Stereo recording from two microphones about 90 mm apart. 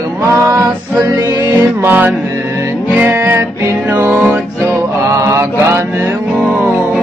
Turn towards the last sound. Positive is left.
turn(degrees=-25)  # may be behind; listen again after turning